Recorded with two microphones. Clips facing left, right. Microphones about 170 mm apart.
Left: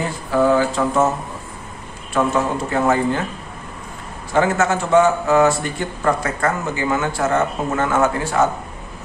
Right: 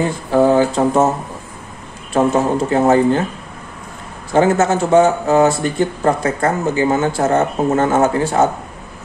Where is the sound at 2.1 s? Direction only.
35° right (ahead or behind).